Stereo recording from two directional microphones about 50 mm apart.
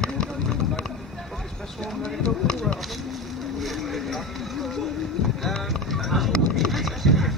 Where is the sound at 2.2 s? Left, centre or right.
Centre.